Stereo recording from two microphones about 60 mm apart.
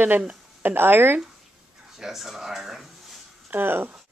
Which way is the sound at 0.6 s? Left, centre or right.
Right.